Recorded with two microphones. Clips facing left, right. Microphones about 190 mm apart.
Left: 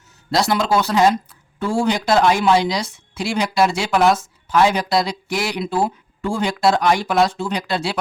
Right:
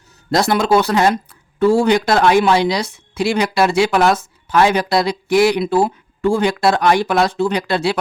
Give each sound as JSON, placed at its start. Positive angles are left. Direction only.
{"t": 0.3, "sound": "a woman's voice", "side_deg": -55}